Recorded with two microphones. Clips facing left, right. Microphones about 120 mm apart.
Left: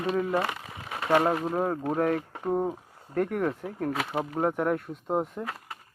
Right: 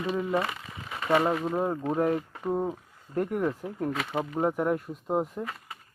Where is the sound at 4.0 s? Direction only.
15° left (ahead or behind).